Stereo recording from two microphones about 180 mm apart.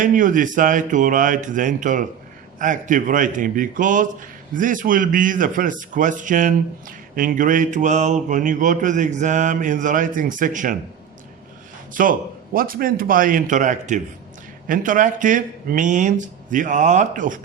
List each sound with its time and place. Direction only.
0.0 s a man's voice: 45° right (ahead or behind)
12.0 s a man's voice: 50° right (ahead or behind)